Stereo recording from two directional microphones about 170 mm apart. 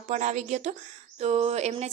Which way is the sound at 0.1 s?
45° right (ahead or behind).